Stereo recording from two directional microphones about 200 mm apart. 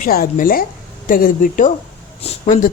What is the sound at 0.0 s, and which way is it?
Speech, 45° left (ahead or behind).